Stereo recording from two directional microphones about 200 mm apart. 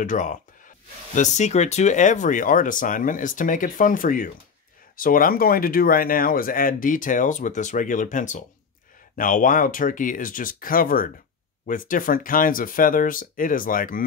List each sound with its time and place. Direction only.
0.0 s speech: 40° left (ahead or behind)